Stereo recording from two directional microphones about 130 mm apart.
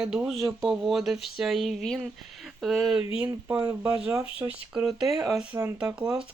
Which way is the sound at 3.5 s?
25° right (ahead or behind).